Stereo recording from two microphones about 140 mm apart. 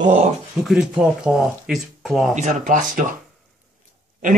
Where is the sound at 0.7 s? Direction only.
5° right (ahead or behind).